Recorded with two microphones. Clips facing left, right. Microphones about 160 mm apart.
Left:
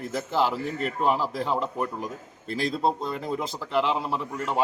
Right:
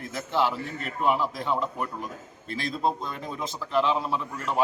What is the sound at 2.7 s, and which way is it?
Speech, 30° left (ahead or behind).